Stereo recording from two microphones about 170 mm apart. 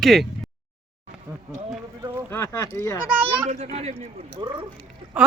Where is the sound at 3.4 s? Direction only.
40° right (ahead or behind).